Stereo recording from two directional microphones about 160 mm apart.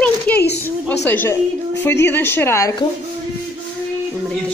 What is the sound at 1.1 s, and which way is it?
A man's voice, 15° left (ahead or behind).